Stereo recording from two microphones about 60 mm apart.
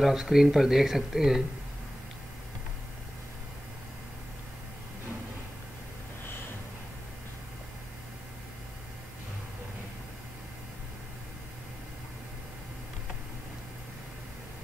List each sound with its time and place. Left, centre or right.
0.0 s speech: centre